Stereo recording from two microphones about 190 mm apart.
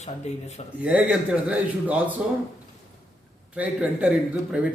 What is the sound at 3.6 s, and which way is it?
Speech, 5° right (ahead or behind).